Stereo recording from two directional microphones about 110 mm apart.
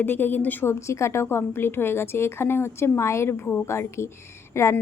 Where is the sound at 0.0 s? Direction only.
20° left (ahead or behind).